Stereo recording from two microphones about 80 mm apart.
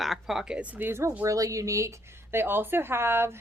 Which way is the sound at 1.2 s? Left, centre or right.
Right.